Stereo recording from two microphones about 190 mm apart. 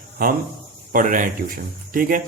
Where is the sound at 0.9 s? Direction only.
45° right (ahead or behind).